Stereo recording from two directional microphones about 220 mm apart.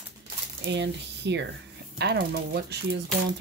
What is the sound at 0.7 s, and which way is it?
Speech, 50° right (ahead or behind).